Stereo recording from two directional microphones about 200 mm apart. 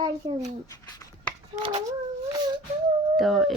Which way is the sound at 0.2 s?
20° right (ahead or behind).